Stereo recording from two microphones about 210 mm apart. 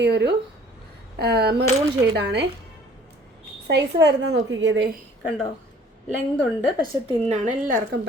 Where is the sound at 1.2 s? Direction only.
50° right (ahead or behind).